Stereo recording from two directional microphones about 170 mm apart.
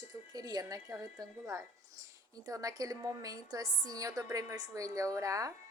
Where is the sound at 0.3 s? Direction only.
20° right (ahead or behind).